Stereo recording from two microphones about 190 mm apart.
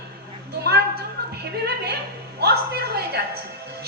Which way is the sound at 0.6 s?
55° right (ahead or behind).